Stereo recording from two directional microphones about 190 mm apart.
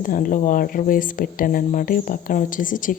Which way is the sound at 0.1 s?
45° left (ahead or behind).